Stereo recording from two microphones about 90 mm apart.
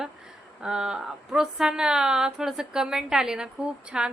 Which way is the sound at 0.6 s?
10° right (ahead or behind).